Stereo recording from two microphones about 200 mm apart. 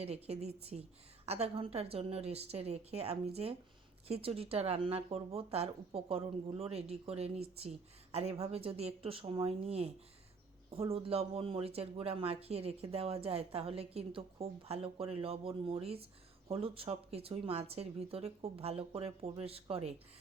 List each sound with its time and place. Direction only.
0.0 s a woman's voice: 30° right (ahead or behind)